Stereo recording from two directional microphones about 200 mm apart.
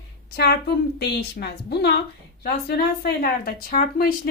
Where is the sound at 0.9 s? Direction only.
55° left (ahead or behind).